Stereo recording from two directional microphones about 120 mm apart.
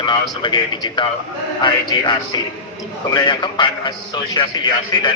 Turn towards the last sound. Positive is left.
turn(degrees=40)  # may be behind; listen again after turning